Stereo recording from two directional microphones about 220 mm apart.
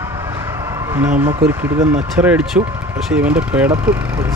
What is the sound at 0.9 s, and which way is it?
Speech, 10° right (ahead or behind).